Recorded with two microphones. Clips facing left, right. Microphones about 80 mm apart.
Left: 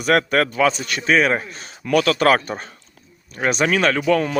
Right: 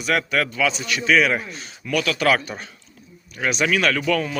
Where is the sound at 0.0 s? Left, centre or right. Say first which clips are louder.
Left 4 dB; left.